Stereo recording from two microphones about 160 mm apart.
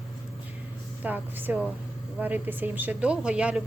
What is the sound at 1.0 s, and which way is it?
Speech, 10° right (ahead or behind).